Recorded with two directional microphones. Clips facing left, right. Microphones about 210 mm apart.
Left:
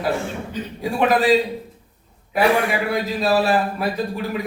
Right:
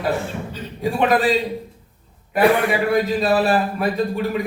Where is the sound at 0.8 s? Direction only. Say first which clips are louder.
Right 1 dB; centre (ahead or behind).